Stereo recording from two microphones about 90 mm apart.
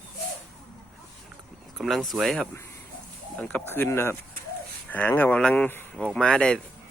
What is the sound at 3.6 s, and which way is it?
Speech, 25° left (ahead or behind).